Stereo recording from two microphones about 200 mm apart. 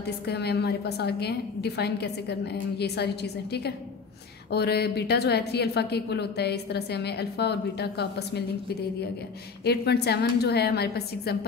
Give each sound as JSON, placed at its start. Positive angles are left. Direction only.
{"t": 0.0, "sound": "a woman's voice", "side_deg": 55}
{"t": 4.5, "sound": "a woman's voice", "side_deg": 55}
{"t": 9.7, "sound": "a woman's voice", "side_deg": 55}